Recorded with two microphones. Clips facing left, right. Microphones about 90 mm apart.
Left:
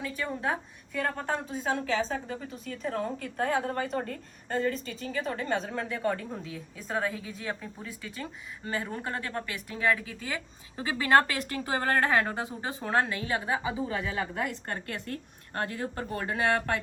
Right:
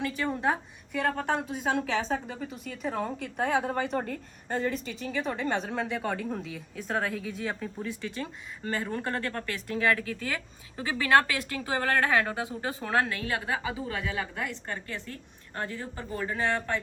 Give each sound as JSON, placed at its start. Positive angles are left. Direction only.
{"t": 0.0, "sound": "a woman's voice", "side_deg": 0}
{"t": 3.4, "sound": "a woman's voice", "side_deg": -15}
{"t": 4.5, "sound": "a woman's voice", "side_deg": 0}